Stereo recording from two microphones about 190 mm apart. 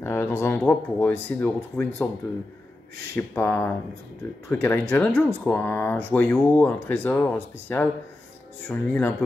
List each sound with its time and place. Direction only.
0.0 s speech: 15° left (ahead or behind)
3.2 s speech: 15° left (ahead or behind)